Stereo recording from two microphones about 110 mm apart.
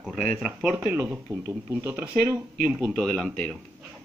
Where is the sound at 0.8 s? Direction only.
15° right (ahead or behind).